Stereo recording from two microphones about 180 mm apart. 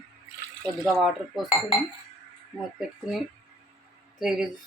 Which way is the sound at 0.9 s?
Centre (ahead or behind).